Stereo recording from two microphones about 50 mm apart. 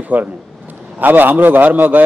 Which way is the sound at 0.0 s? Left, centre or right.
Right.